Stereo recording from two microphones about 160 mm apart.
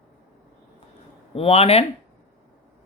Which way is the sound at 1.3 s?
35° left (ahead or behind).